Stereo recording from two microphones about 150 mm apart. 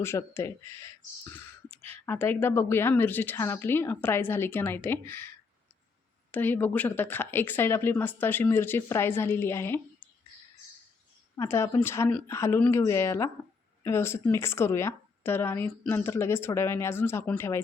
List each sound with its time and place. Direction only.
0.0 s speech: 15° left (ahead or behind)
6.3 s speech: 10° left (ahead or behind)
11.3 s speech: 15° left (ahead or behind)